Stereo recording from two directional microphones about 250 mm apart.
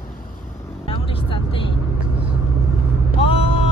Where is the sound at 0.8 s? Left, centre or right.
Left.